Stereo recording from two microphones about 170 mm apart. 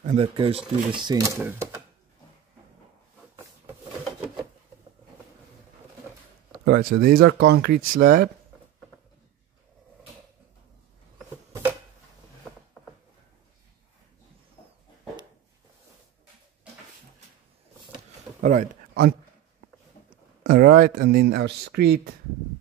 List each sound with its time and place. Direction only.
0.0 s speech: 45° right (ahead or behind)
0.4 s speech: 30° right (ahead or behind); by 1.8 s 15° right (ahead or behind)
6.6 s speech: 60° right (ahead or behind)
18.4 s a sound: 50° right (ahead or behind)
20.4 s speech: 60° right (ahead or behind)